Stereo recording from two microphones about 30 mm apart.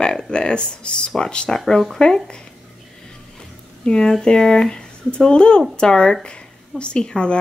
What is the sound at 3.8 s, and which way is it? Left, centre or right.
Speech, left.